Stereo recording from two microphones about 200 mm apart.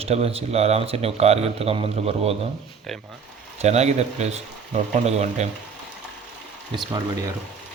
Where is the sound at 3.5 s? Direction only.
35° right (ahead or behind).